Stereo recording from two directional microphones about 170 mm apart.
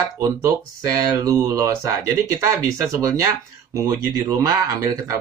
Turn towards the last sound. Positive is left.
turn(degrees=-20)  # may be behind; listen again after turning